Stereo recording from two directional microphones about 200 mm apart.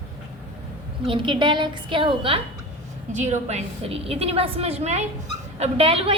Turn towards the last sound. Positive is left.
turn(degrees=-30)  # may be behind; listen again after turning